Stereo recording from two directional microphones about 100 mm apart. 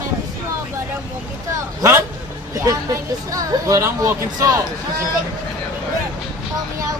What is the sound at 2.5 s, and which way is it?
Speech, 35° right (ahead or behind).